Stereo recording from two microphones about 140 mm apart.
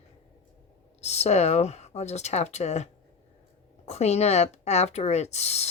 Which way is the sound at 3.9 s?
50° left (ahead or behind).